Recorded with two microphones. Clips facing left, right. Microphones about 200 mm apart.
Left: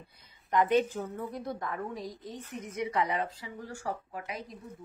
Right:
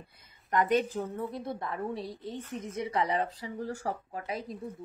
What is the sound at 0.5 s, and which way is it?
A woman's voice, 40° right (ahead or behind).